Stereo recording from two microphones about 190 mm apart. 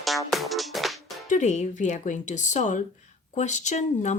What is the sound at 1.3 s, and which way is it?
Speech, 40° left (ahead or behind).